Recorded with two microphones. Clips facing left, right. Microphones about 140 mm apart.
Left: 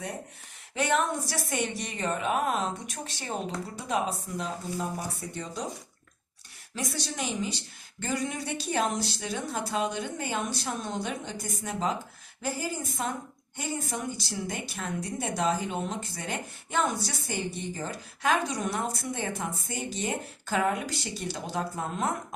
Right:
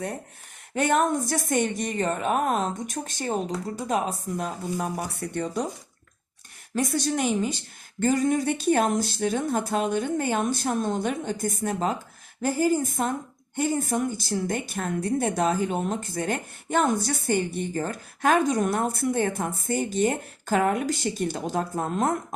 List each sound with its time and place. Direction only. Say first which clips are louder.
0.7 s a woman's voice: right 5 dB; 45° right (ahead or behind)
4.8 s speech: right 4 dB; 65° right (ahead or behind)
6.7 s a woman's voice: right 9 dB; 50° right (ahead or behind)